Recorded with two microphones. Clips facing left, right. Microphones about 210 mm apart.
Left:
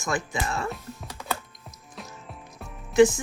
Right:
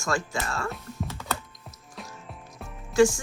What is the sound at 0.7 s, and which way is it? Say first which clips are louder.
Speech: right 1 dB; centre (ahead or behind).